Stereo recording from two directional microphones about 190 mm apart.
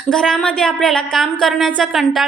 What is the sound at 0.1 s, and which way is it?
Speech, 5° left (ahead or behind).